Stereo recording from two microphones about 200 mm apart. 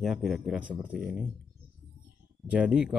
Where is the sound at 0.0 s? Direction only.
Centre (ahead or behind).